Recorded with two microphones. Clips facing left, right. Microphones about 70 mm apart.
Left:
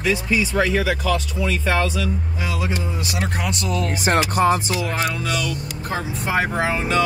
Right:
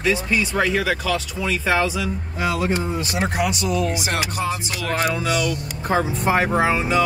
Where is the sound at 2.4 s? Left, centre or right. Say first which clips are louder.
Right 6 dB; right.